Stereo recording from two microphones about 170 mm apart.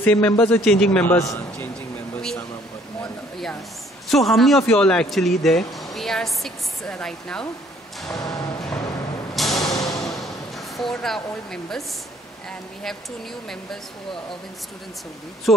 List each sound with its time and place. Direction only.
0.0 s a man's voice: 10° left (ahead or behind)
1.1 s a man's voice: 15° left (ahead or behind)
3.0 s a sound: centre (ahead or behind)
4.1 s a woman's voice: centre (ahead or behind)
8.1 s music: 20° left (ahead or behind)
9.3 s a sound: centre (ahead or behind)
9.8 s music: 20° left (ahead or behind)
10.8 s speech: centre (ahead or behind)
15.5 s speech: centre (ahead or behind)